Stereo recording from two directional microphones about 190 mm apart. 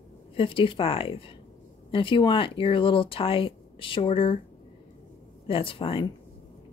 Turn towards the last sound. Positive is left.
turn(degrees=30)  # may be behind; listen again after turning